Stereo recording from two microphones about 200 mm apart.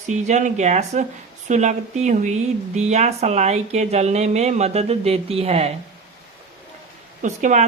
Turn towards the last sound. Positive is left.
turn(degrees=-40)  # may be behind; listen again after turning